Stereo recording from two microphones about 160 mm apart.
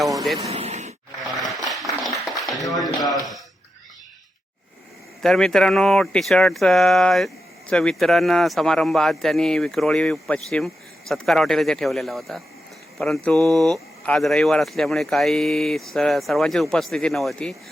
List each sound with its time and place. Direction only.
0.3 s vehicle: 40° right (ahead or behind)
1.3 s a sound: centre (ahead or behind)
2.7 s speech: centre (ahead or behind)
5.2 s speech: 5° left (ahead or behind)